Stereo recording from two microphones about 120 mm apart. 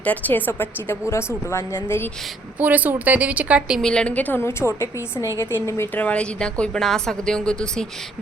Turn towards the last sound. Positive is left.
turn(degrees=5)  # may be behind; listen again after turning